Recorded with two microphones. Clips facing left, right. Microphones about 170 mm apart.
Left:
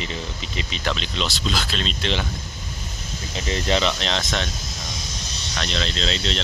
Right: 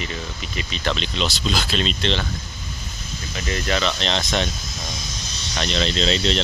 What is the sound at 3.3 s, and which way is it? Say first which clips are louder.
Speech: left 1 dB; 25° left (ahead or behind).